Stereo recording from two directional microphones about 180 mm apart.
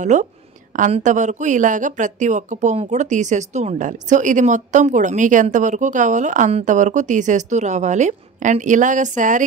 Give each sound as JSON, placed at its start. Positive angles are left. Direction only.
{"t": 0.0, "sound": "a woman's voice", "side_deg": -40}